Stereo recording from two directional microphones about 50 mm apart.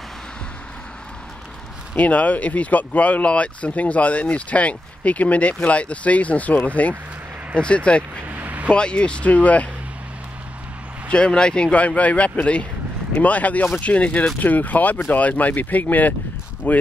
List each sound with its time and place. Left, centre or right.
2.0 s speech: left
8.4 s a sound: right
8.6 s speech: left
11.1 s speech: centre; by 16.8 s left